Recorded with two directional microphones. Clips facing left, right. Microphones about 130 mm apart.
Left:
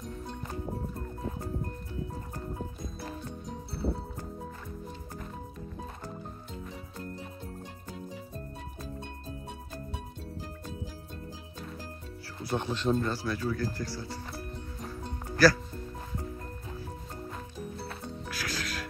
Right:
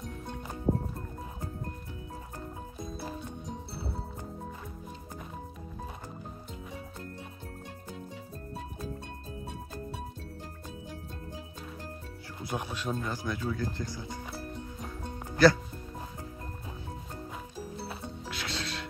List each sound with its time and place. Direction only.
0.7 s music: 30° right (ahead or behind)
12.5 s speech: 5° right (ahead or behind)
15.4 s speech: 20° right (ahead or behind)
17.8 s music: 5° right (ahead or behind)
18.3 s music: 25° right (ahead or behind)